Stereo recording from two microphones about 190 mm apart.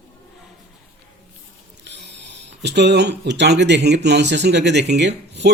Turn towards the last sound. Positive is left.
turn(degrees=-65)  # may be behind; listen again after turning